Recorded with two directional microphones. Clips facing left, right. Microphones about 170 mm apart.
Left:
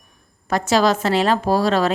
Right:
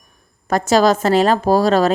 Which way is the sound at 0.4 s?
45° right (ahead or behind).